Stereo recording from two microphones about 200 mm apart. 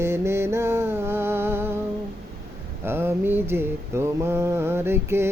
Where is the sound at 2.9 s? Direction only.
10° right (ahead or behind).